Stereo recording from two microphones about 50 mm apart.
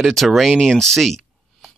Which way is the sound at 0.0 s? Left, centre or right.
Centre.